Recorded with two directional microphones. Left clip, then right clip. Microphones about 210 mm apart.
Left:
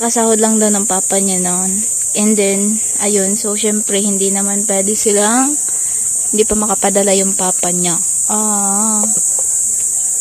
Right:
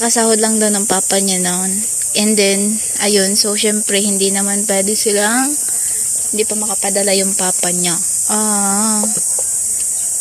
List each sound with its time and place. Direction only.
0.0 s speech: 10° left (ahead or behind)
6.3 s speech: 25° left (ahead or behind)
6.9 s speech: 15° left (ahead or behind)